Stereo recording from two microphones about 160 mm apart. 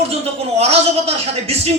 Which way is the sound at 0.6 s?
40° right (ahead or behind).